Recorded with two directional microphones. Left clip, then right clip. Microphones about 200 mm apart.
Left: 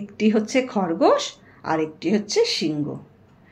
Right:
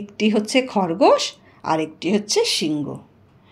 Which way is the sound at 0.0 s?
40° right (ahead or behind).